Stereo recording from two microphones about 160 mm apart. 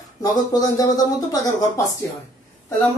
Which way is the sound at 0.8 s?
20° left (ahead or behind).